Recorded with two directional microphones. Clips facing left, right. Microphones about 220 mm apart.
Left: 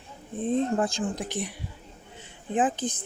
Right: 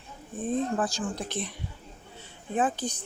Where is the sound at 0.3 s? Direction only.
25° left (ahead or behind).